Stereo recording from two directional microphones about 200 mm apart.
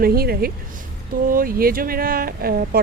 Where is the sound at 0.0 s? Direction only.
50° right (ahead or behind).